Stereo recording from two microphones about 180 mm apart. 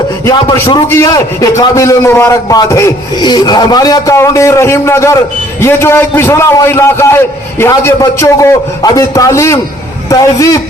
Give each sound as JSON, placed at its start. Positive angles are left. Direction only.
{"t": 0.9, "sound": "a man's voice", "side_deg": 15}